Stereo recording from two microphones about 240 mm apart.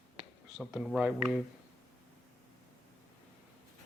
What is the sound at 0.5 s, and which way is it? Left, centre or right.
Speech, centre.